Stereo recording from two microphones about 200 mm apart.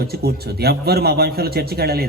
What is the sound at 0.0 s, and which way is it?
A man's voice, 50° right (ahead or behind).